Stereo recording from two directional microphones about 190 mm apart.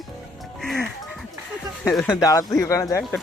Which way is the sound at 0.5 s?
Centre (ahead or behind).